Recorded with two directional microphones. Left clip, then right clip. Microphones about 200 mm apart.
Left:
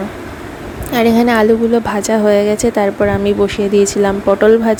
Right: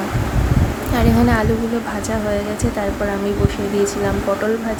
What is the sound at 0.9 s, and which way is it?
A woman's voice, 40° left (ahead or behind).